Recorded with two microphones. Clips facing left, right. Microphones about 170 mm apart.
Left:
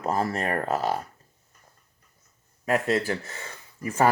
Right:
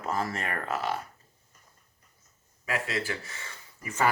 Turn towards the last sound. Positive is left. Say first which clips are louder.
# left 6 dB
turn(degrees=35)  # may be behind; listen again after turning